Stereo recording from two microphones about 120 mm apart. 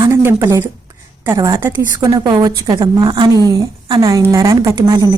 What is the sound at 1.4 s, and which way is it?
Speech, 40° right (ahead or behind).